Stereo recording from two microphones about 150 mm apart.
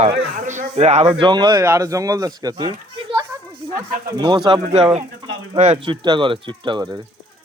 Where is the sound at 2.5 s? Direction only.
30° right (ahead or behind).